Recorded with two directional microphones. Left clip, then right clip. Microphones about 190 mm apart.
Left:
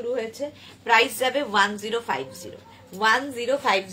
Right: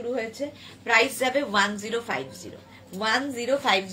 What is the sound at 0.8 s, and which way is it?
A woman's voice, 20° left (ahead or behind).